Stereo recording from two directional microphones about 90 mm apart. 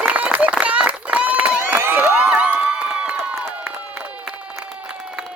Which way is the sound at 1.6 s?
25° right (ahead or behind).